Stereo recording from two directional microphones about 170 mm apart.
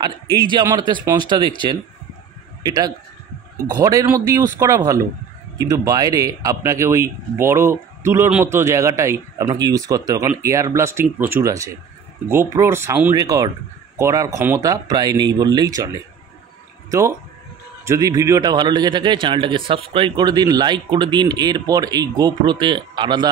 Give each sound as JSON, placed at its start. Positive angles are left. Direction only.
{"t": 0.0, "sound": "speech", "side_deg": -25}
{"t": 2.6, "sound": "a man's voice", "side_deg": -20}
{"t": 16.9, "sound": "speech", "side_deg": -20}